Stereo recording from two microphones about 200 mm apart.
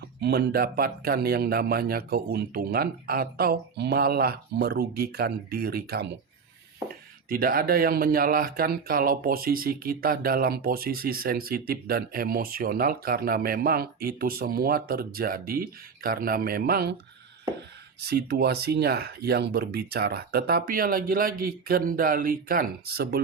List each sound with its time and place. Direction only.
0.2 s speech: 55° right (ahead or behind)
7.3 s speech: 45° right (ahead or behind)
18.0 s speech: 50° right (ahead or behind)